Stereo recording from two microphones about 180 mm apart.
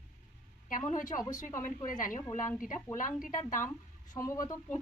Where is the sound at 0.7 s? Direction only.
45° left (ahead or behind).